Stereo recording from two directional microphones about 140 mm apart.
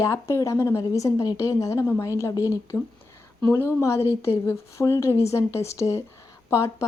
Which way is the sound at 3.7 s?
20° left (ahead or behind).